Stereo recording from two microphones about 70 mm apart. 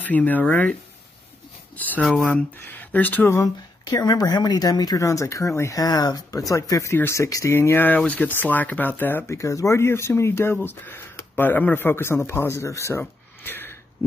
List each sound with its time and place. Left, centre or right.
0.0 s speech: left
2.0 s speech: centre
2.6 s speech: left
3.3 s speech: left
3.8 s speech: left
5.8 s speech: left
7.5 s speech: left
9.3 s speech: left
13.4 s a sound: left